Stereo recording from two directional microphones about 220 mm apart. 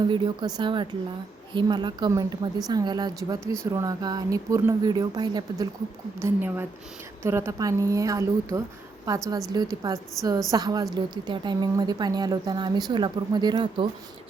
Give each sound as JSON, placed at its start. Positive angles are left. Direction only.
{"t": 0.1, "sound": "a woman's voice", "side_deg": -20}